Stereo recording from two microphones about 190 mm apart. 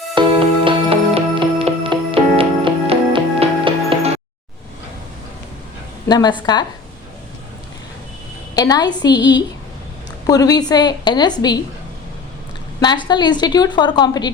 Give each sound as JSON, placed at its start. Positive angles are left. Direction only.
{"t": 0.2, "sound": "music", "side_deg": -30}
{"t": 6.1, "sound": "a woman's voice", "side_deg": 20}
{"t": 8.5, "sound": "a woman's voice", "side_deg": 20}
{"t": 12.8, "sound": "a woman's voice", "side_deg": 25}